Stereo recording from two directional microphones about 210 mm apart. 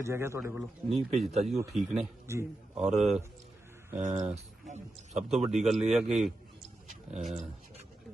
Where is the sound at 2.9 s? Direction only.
30° right (ahead or behind).